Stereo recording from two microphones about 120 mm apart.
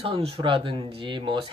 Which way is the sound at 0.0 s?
50° right (ahead or behind).